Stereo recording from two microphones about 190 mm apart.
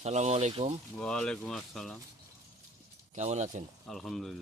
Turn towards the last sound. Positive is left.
turn(degrees=0)  # may be behind; listen again after turning